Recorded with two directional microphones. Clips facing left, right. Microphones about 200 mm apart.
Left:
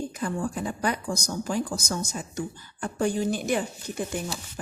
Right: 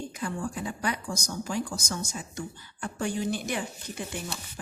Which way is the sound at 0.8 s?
40° left (ahead or behind).